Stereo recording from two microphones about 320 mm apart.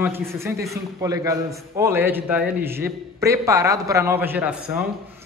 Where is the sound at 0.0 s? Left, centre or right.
Centre.